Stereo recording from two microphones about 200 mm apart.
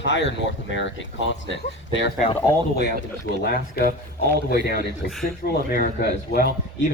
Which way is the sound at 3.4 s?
50° left (ahead or behind).